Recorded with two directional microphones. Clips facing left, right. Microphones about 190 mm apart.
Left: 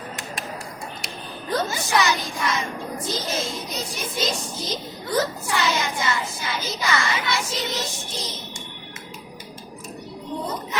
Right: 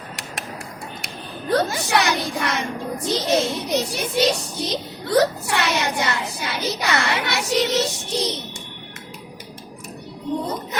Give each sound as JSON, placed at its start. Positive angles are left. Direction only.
{"t": 1.0, "sound": "a woman's voice", "side_deg": -65}